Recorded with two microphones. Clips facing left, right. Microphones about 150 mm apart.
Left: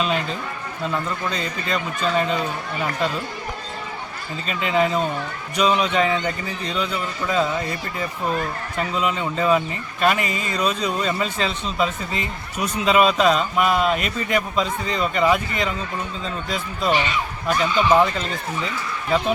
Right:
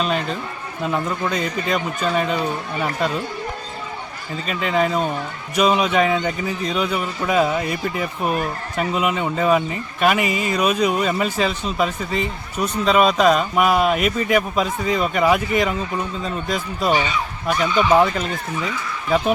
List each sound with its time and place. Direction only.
1.3 s speech: 10° right (ahead or behind)
4.4 s speech: centre (ahead or behind)
13.6 s speech: 50° right (ahead or behind)
13.9 s speech: 5° right (ahead or behind)